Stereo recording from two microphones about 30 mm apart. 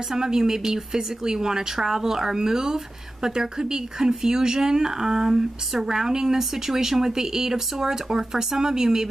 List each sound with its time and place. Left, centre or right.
0.1 s speech: centre